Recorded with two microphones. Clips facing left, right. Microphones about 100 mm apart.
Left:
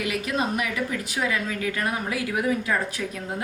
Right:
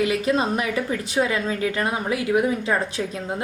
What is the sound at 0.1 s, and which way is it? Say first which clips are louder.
A woman's voice: right 5 dB; 30° right (ahead or behind).